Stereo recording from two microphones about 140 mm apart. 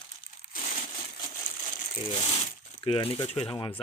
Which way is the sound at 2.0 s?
40° left (ahead or behind).